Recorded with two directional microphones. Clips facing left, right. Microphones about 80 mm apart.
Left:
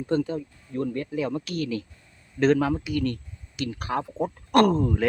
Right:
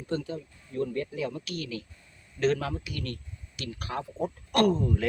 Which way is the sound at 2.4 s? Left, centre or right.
Left.